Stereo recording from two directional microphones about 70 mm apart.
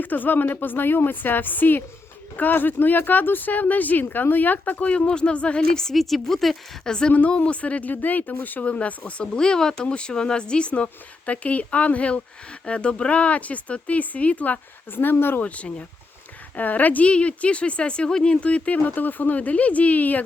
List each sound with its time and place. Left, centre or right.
0.0 s speech: left
15.4 s speech: centre